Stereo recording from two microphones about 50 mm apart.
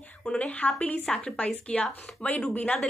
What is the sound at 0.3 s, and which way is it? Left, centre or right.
A woman's voice, left.